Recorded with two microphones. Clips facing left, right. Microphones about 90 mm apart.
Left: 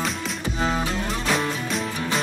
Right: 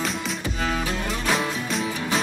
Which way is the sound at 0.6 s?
25° left (ahead or behind).